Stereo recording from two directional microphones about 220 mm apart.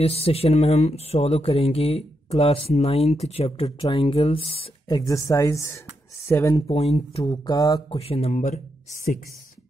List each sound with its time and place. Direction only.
0.0 s speech: 25° left (ahead or behind); by 6.6 s 10° left (ahead or behind)
6.7 s speech: 25° left (ahead or behind)
8.0 s speech: 30° left (ahead or behind)